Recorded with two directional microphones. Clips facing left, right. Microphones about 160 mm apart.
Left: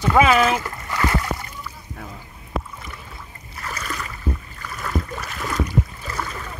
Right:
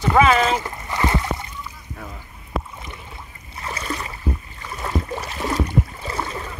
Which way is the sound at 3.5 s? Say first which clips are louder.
Right 2 dB; 25° right (ahead or behind).